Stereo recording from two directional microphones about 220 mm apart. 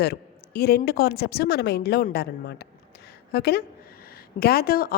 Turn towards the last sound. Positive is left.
turn(degrees=45)  # may be behind; listen again after turning